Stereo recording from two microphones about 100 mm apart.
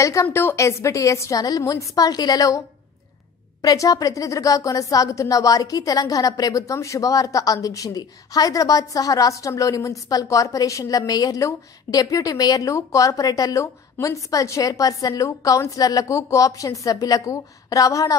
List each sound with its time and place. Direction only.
0.0 s a woman's voice: 30° left (ahead or behind)
3.6 s a woman's voice: 40° left (ahead or behind)